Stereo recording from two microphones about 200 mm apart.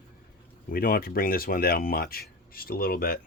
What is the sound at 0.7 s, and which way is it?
Speech, 45° left (ahead or behind).